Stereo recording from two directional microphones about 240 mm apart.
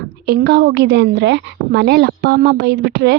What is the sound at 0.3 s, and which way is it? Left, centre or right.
A woman's voice, right.